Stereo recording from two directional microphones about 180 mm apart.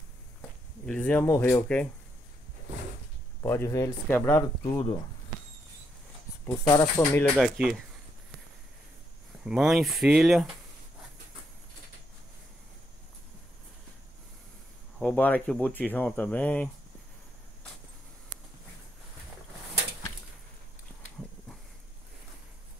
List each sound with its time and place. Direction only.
0.8 s speech: 5° left (ahead or behind)
3.4 s speech: 15° left (ahead or behind)
6.4 s speech: 15° left (ahead or behind)
7.0 s speech: 5° left (ahead or behind)
9.5 s speech: centre (ahead or behind)
15.0 s speech: 5° left (ahead or behind)